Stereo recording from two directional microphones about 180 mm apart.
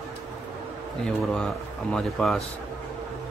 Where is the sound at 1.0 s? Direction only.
5° left (ahead or behind).